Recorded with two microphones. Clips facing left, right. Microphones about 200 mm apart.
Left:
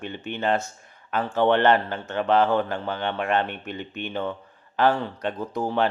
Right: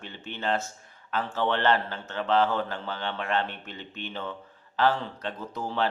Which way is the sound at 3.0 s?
55° left (ahead or behind).